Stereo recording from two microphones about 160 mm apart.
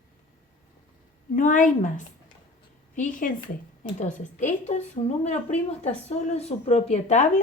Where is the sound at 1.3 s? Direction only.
55° left (ahead or behind).